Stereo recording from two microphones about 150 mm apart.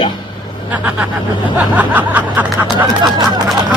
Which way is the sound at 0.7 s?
10° right (ahead or behind).